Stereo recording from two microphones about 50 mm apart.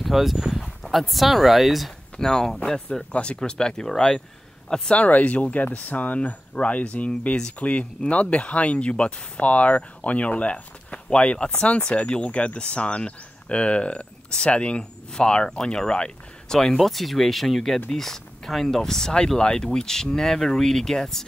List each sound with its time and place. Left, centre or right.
0.0 s speech: centre
2.1 s speech: centre
4.9 s speech: left; by 16.7 s centre
16.7 s speech: centre